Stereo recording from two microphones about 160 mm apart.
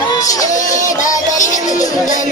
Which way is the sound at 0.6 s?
50° left (ahead or behind).